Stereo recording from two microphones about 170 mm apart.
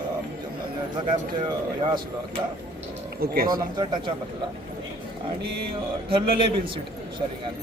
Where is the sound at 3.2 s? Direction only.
60° right (ahead or behind).